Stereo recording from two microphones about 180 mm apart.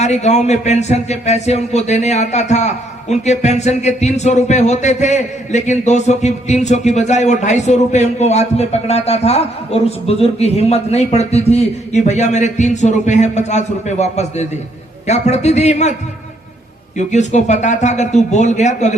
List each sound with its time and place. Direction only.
0.0 s speech: 40° left (ahead or behind)
17.0 s speech: 40° left (ahead or behind)